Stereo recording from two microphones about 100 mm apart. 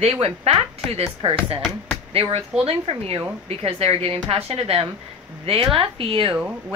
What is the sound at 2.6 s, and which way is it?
Speech, 85° right.